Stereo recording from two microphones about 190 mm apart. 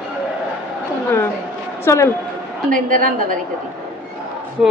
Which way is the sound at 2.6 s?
45° right (ahead or behind).